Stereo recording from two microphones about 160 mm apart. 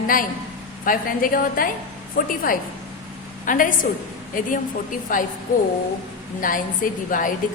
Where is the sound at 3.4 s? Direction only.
55° left (ahead or behind).